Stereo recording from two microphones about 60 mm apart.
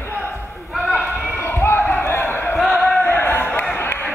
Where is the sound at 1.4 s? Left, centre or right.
Left.